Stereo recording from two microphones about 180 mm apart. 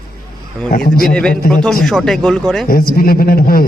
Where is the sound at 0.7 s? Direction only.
55° left (ahead or behind).